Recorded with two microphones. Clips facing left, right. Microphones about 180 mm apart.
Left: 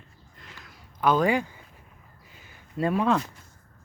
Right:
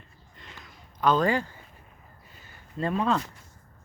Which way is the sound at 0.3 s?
Centre (ahead or behind).